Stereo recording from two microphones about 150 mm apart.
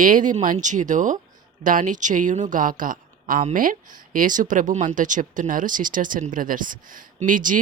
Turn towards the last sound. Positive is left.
turn(degrees=-60)  # may be behind; listen again after turning